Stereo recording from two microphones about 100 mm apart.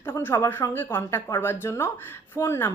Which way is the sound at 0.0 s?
20° left (ahead or behind).